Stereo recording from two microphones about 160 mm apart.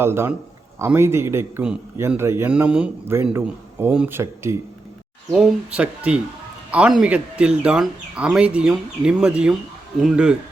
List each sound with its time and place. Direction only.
0.0 s speech: 15° right (ahead or behind)